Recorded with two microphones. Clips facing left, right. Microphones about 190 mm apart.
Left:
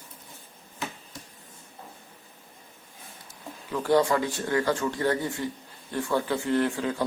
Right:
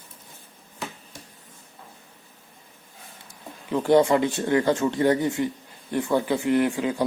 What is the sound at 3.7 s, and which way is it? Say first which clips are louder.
Speech: right 4 dB; 20° right (ahead or behind).